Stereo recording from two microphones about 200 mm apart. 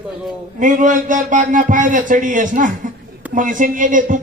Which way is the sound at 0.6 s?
40° right (ahead or behind).